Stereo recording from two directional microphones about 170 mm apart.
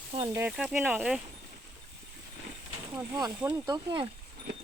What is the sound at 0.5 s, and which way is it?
Speech, 5° right (ahead or behind).